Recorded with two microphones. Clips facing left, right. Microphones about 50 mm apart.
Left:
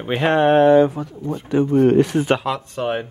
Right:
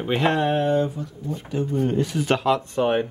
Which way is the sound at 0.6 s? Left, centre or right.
Left.